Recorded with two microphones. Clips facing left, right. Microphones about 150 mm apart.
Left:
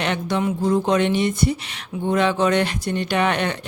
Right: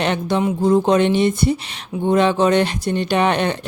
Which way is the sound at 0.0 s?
30° right (ahead or behind).